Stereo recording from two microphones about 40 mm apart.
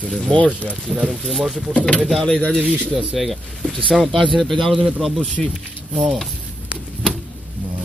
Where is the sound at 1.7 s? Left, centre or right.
Left.